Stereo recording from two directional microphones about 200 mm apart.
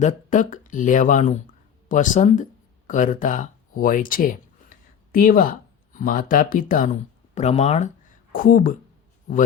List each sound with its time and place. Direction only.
0.0 s speech: 40° left (ahead or behind)